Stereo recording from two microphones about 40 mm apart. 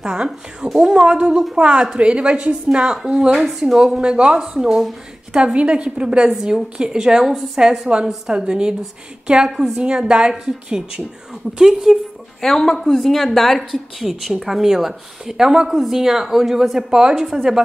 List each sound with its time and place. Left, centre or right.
0.0 s speech: centre
0.7 s speech: centre
0.9 s a woman's voice: right
2.8 s a woman's voice: centre
4.4 s speech: centre
5.4 s a woman's voice: right; by 12.0 s centre
12.4 s speech: centre
17.3 s speech: centre